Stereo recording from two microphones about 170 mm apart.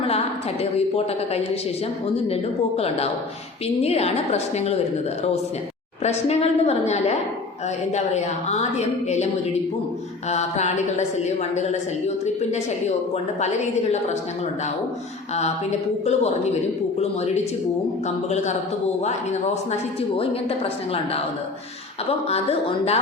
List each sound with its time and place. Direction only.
0.6 s a woman's voice: 35° left (ahead or behind)
6.0 s a woman's voice: 40° left (ahead or behind)
10.2 s a woman's voice: 40° left (ahead or behind)
16.0 s a woman's voice: 40° left (ahead or behind)
22.3 s a woman's voice: 35° left (ahead or behind)